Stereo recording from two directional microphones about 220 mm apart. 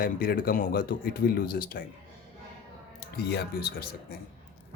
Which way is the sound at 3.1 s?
45° left (ahead or behind).